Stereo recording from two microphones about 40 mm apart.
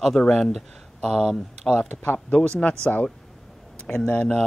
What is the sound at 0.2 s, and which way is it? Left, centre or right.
Speech, left.